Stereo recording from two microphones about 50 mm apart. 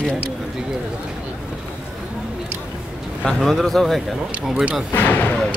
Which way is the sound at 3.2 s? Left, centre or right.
Centre.